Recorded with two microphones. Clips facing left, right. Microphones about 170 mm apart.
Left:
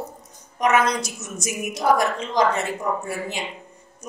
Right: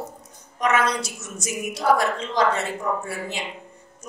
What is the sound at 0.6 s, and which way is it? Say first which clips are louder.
Speech: left 2 dB; 15° left (ahead or behind).